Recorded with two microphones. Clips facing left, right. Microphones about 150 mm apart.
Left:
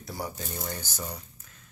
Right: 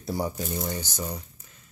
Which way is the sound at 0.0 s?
25° right (ahead or behind).